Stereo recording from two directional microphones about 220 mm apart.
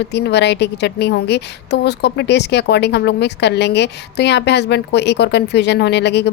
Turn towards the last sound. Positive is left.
turn(degrees=50)  # may be behind; listen again after turning